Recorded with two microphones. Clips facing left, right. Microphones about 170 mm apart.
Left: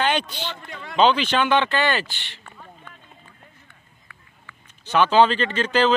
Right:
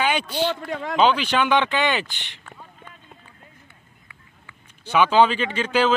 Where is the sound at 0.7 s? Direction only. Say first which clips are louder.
Right 9 dB; 90° right.